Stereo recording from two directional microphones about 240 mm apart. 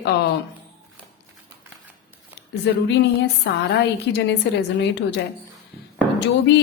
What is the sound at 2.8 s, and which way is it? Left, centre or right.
A woman's voice, left.